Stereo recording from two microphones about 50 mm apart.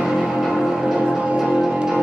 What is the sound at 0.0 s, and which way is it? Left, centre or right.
Music, centre.